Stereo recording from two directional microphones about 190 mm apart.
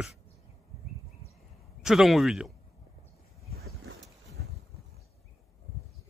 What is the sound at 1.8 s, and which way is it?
Speech, centre (ahead or behind).